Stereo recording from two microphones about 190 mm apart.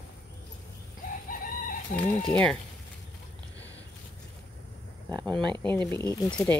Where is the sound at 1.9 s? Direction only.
5° left (ahead or behind).